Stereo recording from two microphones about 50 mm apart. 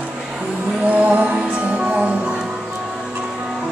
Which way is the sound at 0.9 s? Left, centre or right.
Right.